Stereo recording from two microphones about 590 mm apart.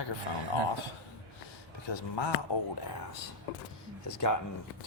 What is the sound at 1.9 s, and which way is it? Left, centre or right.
Speech, left.